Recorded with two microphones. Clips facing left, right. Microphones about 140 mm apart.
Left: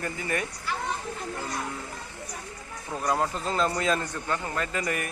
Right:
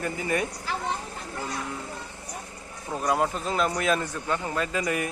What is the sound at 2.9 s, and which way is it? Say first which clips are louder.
A man's voice: right 2 dB; 15° right (ahead or behind).